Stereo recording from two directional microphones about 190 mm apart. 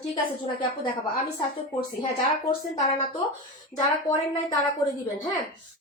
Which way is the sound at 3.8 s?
20° left (ahead or behind).